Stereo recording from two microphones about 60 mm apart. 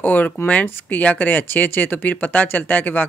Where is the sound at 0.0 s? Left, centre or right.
Left.